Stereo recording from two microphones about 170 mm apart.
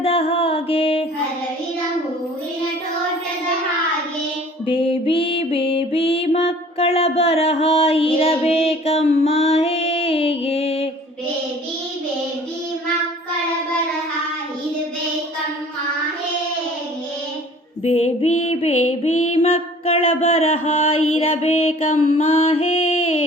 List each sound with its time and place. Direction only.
0.0 s music: 35° left (ahead or behind)
4.6 s music: 30° left (ahead or behind)
17.8 s a sound: 35° left (ahead or behind)